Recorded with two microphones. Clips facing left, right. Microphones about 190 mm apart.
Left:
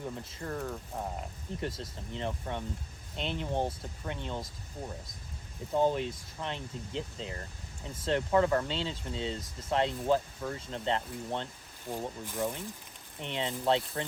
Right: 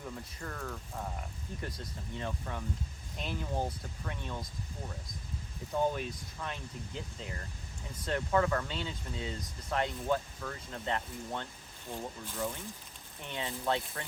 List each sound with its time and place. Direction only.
0.0 s speech: 25° left (ahead or behind)
5.7 s speech: 30° left (ahead or behind)
11.9 s speech: 15° left (ahead or behind)
13.2 s speech: 25° left (ahead or behind)